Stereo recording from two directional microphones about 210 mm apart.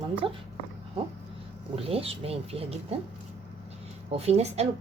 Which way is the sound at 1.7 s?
30° right (ahead or behind).